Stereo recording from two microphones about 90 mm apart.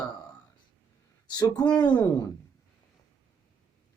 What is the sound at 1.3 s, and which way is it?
Speech, 45° left (ahead or behind).